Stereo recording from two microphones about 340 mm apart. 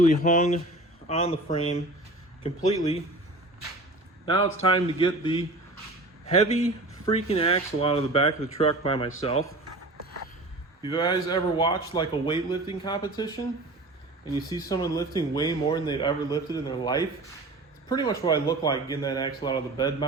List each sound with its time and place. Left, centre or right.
0.0 s speech: left
4.6 s speech: centre
7.0 s speech: centre
10.8 s speech: centre